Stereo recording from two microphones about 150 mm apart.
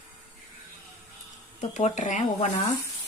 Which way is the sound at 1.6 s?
50° left (ahead or behind).